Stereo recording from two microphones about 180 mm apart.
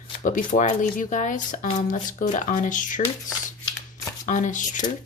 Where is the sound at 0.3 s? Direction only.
45° left (ahead or behind).